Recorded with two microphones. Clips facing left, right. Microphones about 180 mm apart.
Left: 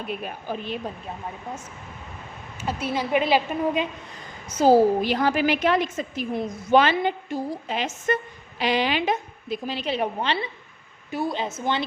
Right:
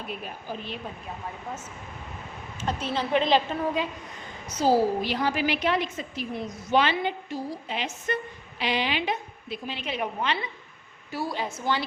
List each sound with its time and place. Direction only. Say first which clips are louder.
0.5 s speech: left 5 dB; 65° left (ahead or behind)
2.6 s a woman's voice: left 2 dB; 10° left (ahead or behind)
4.4 s a woman's voice: left 5 dB; 50° left (ahead or behind); by 10.5 s 30° left (ahead or behind)
11.1 s a woman's voice: left 4 dB; 20° left (ahead or behind)